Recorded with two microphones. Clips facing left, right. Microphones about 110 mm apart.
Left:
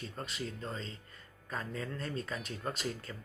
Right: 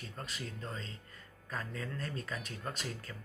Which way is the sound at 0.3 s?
30° left (ahead or behind).